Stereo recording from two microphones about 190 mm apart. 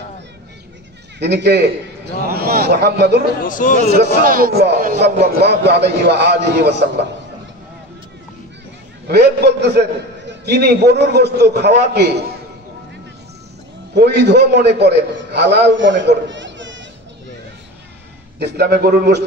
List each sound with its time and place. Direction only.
1.2 s a man's voice: 60° right (ahead or behind)
3.4 s speech: 45° left (ahead or behind)
3.9 s a man's voice: 50° right (ahead or behind)
9.0 s a man's voice: 55° right (ahead or behind)
13.9 s a man's voice: 60° right (ahead or behind)
18.4 s a man's voice: 55° right (ahead or behind)